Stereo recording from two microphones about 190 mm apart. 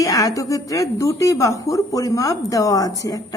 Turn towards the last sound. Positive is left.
turn(degrees=20)  # may be behind; listen again after turning